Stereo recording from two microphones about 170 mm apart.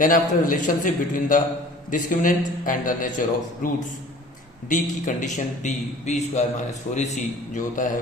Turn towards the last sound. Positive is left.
turn(degrees=45)  # may be behind; listen again after turning